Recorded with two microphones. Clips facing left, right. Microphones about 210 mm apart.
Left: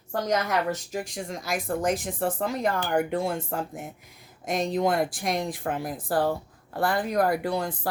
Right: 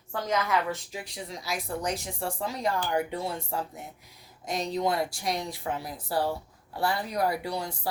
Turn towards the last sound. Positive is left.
turn(degrees=50)  # may be behind; listen again after turning